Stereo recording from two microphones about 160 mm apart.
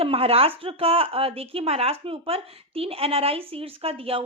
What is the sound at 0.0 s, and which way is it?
Speech, 35° right (ahead or behind).